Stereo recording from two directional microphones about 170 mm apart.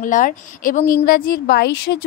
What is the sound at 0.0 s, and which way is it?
Speech, 50° left (ahead or behind).